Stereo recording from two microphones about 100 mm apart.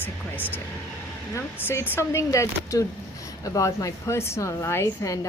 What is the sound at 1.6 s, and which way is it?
A woman's voice, 20° left (ahead or behind).